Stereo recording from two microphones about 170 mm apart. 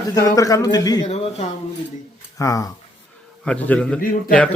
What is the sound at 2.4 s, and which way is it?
Speech, 20° left (ahead or behind).